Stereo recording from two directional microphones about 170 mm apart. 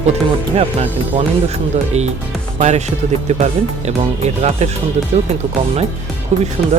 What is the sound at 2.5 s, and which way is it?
Speech, 40° right (ahead or behind).